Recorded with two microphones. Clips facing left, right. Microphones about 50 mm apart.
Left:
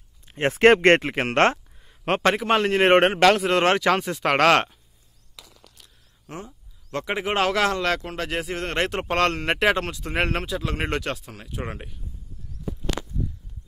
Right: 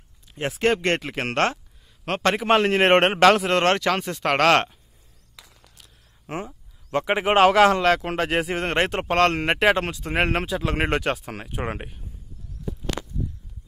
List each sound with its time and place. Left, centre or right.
0.3 s speech: left
0.6 s speech: left
1.0 s speech: centre
1.4 s a sound: left
2.3 s speech: centre
3.5 s speech: centre
6.2 s speech: right
11.2 s speech: right
11.5 s speech: right